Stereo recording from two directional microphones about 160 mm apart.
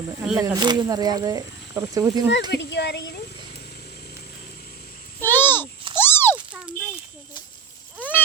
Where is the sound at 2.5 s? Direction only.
90° left.